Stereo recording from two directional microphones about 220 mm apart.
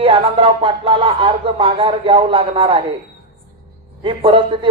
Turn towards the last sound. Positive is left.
turn(degrees=-25)  # may be behind; listen again after turning